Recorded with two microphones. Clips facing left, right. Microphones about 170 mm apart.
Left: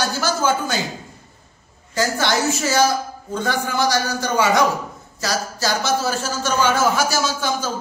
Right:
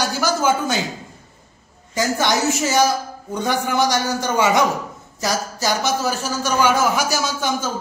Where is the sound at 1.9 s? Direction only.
20° right (ahead or behind).